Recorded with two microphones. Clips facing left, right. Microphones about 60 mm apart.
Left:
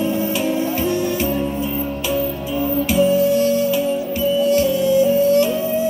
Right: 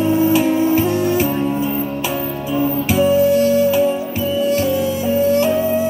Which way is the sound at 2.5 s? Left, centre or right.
Right.